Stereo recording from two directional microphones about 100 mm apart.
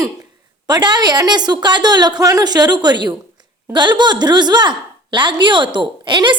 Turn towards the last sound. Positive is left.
turn(degrees=-50)  # may be behind; listen again after turning